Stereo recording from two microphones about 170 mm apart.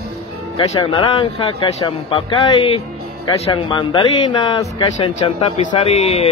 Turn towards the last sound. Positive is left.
turn(degrees=35)  # may be behind; listen again after turning